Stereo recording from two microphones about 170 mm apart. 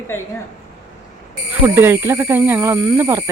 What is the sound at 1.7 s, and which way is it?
Speech, 15° right (ahead or behind).